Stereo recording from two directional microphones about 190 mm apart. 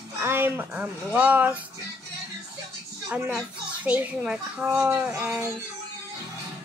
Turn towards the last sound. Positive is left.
turn(degrees=-10)  # may be behind; listen again after turning